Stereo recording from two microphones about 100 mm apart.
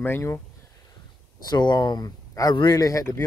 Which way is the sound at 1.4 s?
45° left (ahead or behind).